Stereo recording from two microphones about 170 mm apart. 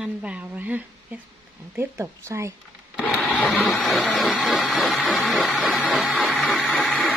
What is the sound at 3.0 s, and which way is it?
Blender, 5° left (ahead or behind).